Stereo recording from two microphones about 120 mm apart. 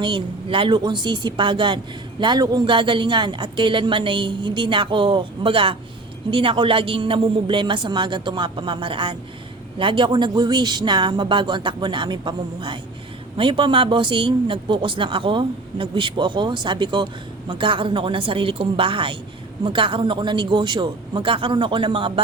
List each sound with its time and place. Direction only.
0.0 s speech: 45° right (ahead or behind)